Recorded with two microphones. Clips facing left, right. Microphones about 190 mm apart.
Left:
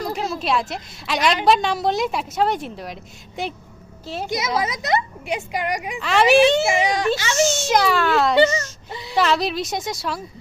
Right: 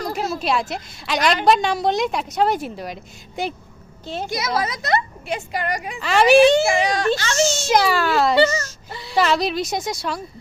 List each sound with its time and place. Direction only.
0.0 s a woman's voice: centre (ahead or behind)
4.3 s a woman's voice: 20° left (ahead or behind)
6.0 s a woman's voice: centre (ahead or behind)
6.7 s speech: 20° left (ahead or behind)
7.1 s a woman's voice: 5° left (ahead or behind)
8.9 s a sound: 20° left (ahead or behind)
9.1 s a woman's voice: centre (ahead or behind)